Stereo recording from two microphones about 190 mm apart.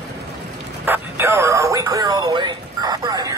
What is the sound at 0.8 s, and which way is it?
Music, 10° right (ahead or behind).